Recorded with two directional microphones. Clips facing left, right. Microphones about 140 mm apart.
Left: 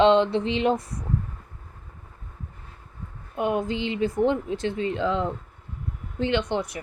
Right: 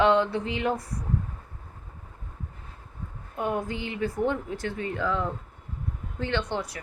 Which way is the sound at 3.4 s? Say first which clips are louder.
Left 4 dB; 20° left (ahead or behind).